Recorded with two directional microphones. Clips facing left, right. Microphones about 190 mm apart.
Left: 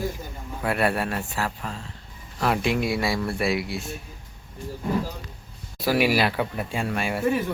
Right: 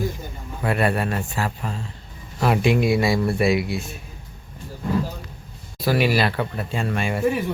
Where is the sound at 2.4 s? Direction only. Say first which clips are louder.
Right 4 dB; 10° right (ahead or behind).